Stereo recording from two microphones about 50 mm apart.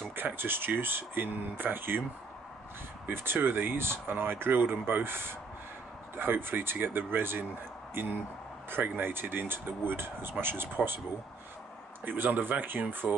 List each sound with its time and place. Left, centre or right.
0.1 s speech: right
3.1 s speech: right
8.6 s speech: right
12.0 s speech: right
13.0 s speech: centre